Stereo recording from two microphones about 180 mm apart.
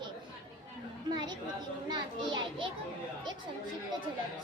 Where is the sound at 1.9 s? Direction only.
25° right (ahead or behind).